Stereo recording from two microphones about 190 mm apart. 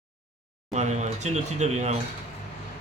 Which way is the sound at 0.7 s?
35° right (ahead or behind).